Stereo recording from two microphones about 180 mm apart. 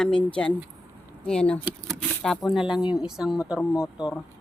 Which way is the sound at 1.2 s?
5° left (ahead or behind).